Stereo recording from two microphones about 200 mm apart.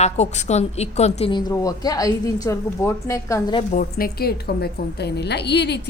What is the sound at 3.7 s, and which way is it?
A woman's voice, 50° left (ahead or behind).